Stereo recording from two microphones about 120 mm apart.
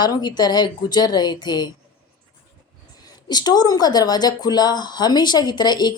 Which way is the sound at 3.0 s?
35° left (ahead or behind).